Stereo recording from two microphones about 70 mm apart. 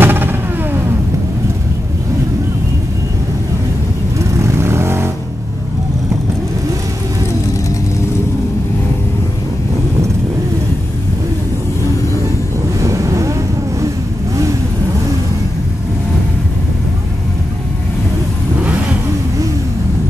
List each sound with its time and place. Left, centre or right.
0.0 s vehicle: right
4.4 s vehicle: right
12.8 s boat: right